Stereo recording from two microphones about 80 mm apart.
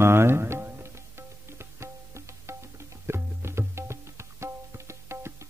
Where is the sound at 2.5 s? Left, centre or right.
Right.